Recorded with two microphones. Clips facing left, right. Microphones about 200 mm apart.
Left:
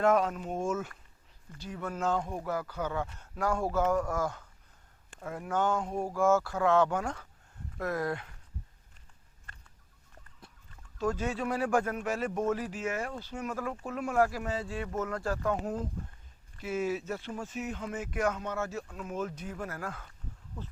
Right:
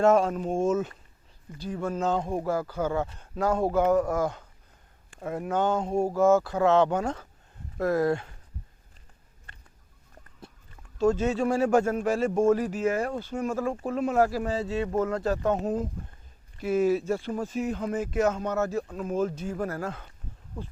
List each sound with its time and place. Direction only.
0.0 s speech: 30° right (ahead or behind)
1.5 s speech: 35° right (ahead or behind)
10.9 s speech: 25° right (ahead or behind)
12.5 s speech: 45° right (ahead or behind)
13.1 s speech: 50° right (ahead or behind)
13.4 s speech: 25° right (ahead or behind)
16.6 s speech: 40° right (ahead or behind)
18.4 s speech: 40° right (ahead or behind)
19.8 s speech: 25° right (ahead or behind)